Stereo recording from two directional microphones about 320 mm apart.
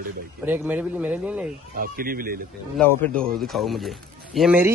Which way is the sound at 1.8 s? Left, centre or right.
Right.